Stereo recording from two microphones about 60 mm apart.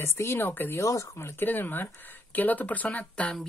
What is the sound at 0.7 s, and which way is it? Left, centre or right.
Speech, left.